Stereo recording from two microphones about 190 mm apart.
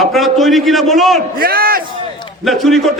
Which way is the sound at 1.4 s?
50° right (ahead or behind).